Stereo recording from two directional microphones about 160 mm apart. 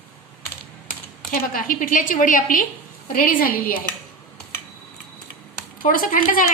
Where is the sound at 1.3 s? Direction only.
60° left (ahead or behind).